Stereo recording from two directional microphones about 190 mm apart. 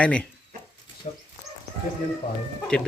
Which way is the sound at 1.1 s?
40° left (ahead or behind).